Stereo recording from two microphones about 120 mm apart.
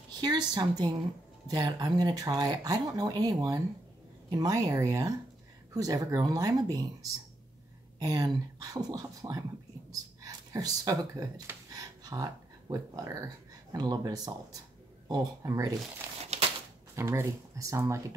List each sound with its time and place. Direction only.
0.2 s speech: 35° right (ahead or behind)
9.8 s a sound: 30° right (ahead or behind)
11.7 s speech: 30° right (ahead or behind)
16.9 s speech: 20° right (ahead or behind)